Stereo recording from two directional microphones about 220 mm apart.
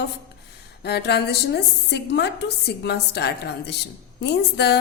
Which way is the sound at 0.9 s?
50° left (ahead or behind).